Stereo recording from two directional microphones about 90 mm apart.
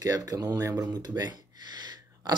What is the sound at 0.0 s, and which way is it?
Speech, 40° right (ahead or behind).